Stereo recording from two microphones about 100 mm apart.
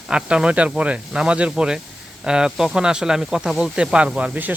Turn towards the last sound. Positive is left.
turn(degrees=-15)  # may be behind; listen again after turning